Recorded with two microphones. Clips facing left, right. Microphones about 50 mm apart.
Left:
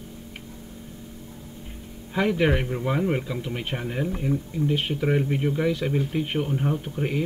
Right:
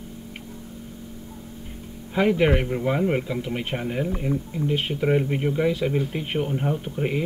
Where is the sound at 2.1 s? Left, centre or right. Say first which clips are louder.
Right 2 dB; centre.